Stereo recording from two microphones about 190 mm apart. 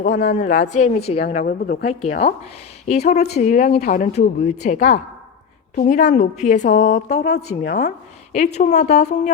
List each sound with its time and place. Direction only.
0.0 s speech: 40° left (ahead or behind)
1.5 s speech: 55° left (ahead or behind)
3.1 s speech: 35° left (ahead or behind)
7.2 s speech: 60° left (ahead or behind)
7.7 s a woman's voice: 40° left (ahead or behind)